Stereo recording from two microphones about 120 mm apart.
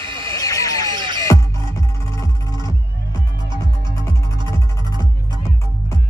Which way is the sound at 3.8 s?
25° left (ahead or behind).